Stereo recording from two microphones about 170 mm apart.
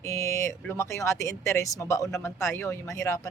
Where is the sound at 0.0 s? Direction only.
20° left (ahead or behind).